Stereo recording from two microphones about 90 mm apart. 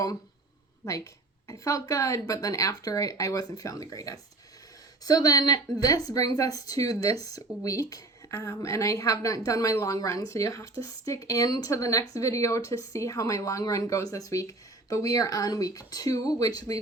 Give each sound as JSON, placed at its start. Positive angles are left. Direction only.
{"t": 1.5, "sound": "a woman's voice", "side_deg": 40}